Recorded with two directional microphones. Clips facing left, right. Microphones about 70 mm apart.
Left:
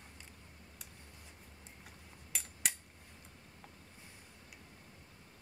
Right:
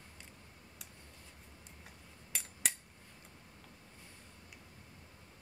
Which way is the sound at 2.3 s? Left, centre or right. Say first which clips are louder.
Right 1 dB; centre.